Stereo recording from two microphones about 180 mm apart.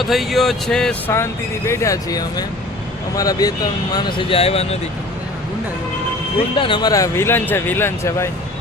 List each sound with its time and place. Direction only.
0.0 s speech: centre (ahead or behind); by 4.8 s 35° left (ahead or behind)
6.6 s speech: 25° left (ahead or behind)